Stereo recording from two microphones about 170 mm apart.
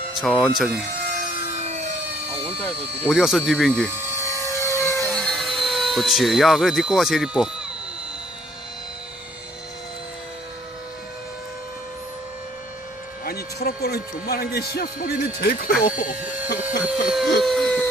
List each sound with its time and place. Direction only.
0.2 s speech: centre (ahead or behind)
1.5 s a sound: 40° right (ahead or behind)
3.1 s speech: centre (ahead or behind)
4.5 s a sound: 15° left (ahead or behind)
5.1 s speech: 5° left (ahead or behind)
13.2 s speech: 65° left (ahead or behind)
16.1 s speech: 10° right (ahead or behind)